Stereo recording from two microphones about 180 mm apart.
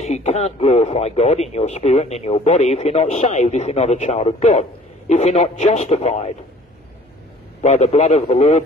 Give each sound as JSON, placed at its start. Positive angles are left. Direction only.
{"t": 0.0, "sound": "speech", "side_deg": 40}
{"t": 7.6, "sound": "speech", "side_deg": 40}